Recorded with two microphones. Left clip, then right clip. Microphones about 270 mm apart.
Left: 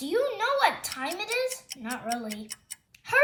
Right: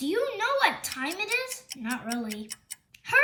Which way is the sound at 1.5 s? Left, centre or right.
Centre.